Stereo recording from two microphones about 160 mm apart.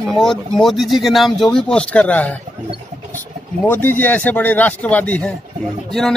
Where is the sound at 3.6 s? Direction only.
10° left (ahead or behind).